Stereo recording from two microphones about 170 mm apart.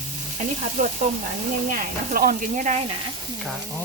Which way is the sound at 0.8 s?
50° right (ahead or behind).